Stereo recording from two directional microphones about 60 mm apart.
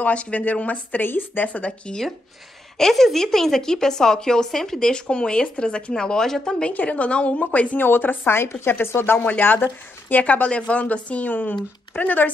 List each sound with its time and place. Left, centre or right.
0.0 s speech: left
2.8 s a woman's voice: centre
6.7 s speech: left
8.3 s speech: left